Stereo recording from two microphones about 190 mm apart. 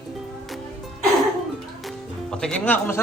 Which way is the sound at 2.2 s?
5° left (ahead or behind).